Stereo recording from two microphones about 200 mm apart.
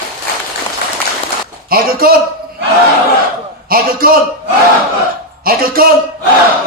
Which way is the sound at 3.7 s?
45° right (ahead or behind).